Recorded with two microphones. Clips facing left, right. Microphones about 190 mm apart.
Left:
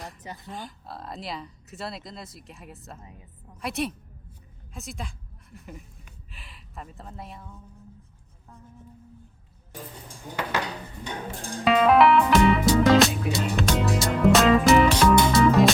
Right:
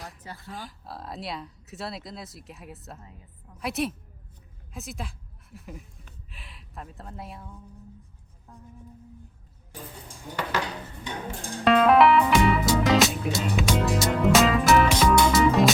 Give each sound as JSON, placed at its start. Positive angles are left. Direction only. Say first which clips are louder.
{"t": 0.2, "sound": "speech", "louder": "left 2 dB", "side_deg": 15}
{"t": 0.5, "sound": "a woman's voice", "louder": "right 1 dB", "side_deg": 0}
{"t": 11.6, "sound": "music", "louder": "even", "side_deg": 0}